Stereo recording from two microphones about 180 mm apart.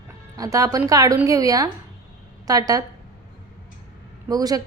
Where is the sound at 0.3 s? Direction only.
20° right (ahead or behind).